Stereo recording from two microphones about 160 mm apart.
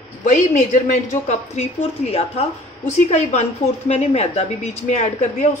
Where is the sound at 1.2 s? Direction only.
45° left (ahead or behind).